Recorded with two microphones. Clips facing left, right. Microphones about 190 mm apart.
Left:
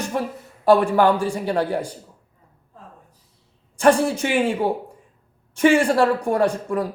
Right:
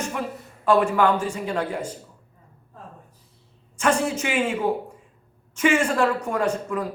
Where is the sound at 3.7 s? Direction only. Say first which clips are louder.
Left 6 dB; 35° left (ahead or behind).